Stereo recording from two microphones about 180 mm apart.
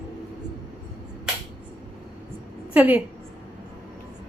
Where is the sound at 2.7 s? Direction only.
10° right (ahead or behind).